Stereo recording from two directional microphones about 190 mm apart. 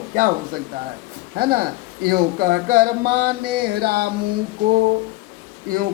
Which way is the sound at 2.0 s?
50° right (ahead or behind).